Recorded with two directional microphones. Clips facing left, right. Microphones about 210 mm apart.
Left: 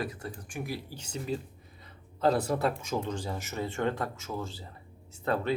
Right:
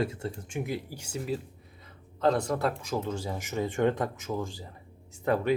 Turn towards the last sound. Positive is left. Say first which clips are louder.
# right 3 dB
turn(degrees=-15)  # may be behind; listen again after turning